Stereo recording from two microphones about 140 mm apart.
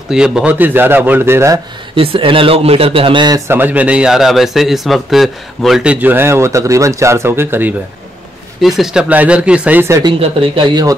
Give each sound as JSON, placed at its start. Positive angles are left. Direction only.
{"t": 0.1, "sound": "speech", "side_deg": -5}
{"t": 2.0, "sound": "a man's voice", "side_deg": -40}
{"t": 3.4, "sound": "a man's voice", "side_deg": -15}
{"t": 5.9, "sound": "speech", "side_deg": -15}
{"t": 8.5, "sound": "speech", "side_deg": 0}
{"t": 10.0, "sound": "a man's voice", "side_deg": -40}